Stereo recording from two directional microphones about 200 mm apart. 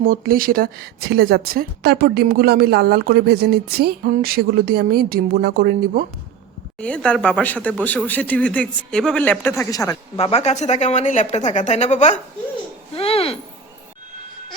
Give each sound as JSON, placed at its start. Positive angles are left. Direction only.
{"t": 0.0, "sound": "a woman's voice", "side_deg": -45}
{"t": 6.7, "sound": "speech", "side_deg": 5}
{"t": 10.2, "sound": "speech", "side_deg": 30}